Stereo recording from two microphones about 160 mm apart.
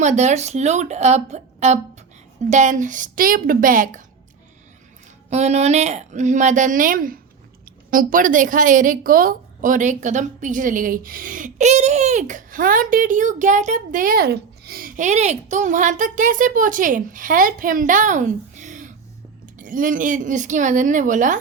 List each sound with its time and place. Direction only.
0.0 s a woman's voice: 45° right (ahead or behind)
5.3 s a woman's voice: 45° right (ahead or behind)